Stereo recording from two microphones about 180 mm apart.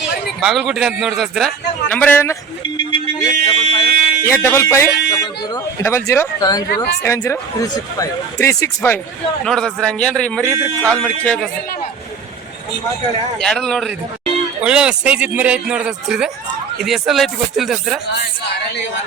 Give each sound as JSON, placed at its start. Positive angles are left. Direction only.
{"t": 0.4, "sound": "a man's voice", "side_deg": -5}
{"t": 2.6, "sound": "a sound", "side_deg": 25}
{"t": 4.2, "sound": "speech", "side_deg": 15}
{"t": 9.4, "sound": "a man's voice", "side_deg": 5}
{"t": 10.5, "sound": "speech", "side_deg": -15}
{"t": 11.0, "sound": "a man's voice", "side_deg": 5}
{"t": 13.4, "sound": "a man's voice", "side_deg": 5}